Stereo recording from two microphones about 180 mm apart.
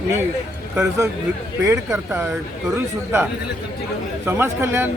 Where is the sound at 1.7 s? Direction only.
15° right (ahead or behind).